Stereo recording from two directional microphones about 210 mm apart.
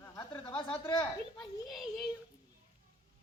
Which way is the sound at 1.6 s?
Centre (ahead or behind).